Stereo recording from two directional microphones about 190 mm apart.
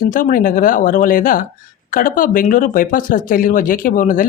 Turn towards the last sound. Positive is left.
turn(degrees=45)  # may be behind; listen again after turning